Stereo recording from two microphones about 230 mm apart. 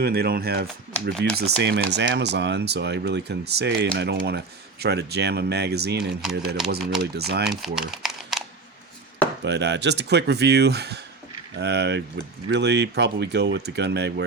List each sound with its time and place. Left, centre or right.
0.0 s speech: right
7.6 s a sound: centre
9.4 s speech: right